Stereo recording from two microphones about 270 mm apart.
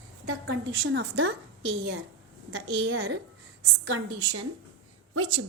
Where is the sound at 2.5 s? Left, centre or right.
Right.